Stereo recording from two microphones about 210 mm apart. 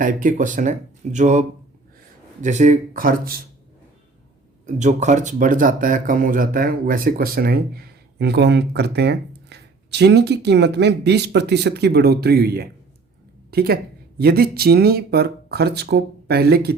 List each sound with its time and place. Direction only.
0.0 s speech: 40° right (ahead or behind)
4.6 s a woman's voice: 35° right (ahead or behind)